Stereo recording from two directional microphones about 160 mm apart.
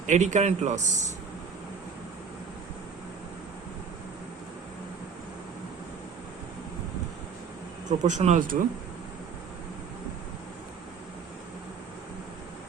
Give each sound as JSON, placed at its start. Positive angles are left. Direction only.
{"t": 0.0, "sound": "speech", "side_deg": -50}
{"t": 7.9, "sound": "speech", "side_deg": -50}